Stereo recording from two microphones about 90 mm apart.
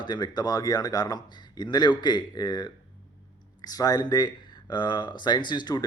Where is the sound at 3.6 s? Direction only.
45° left (ahead or behind).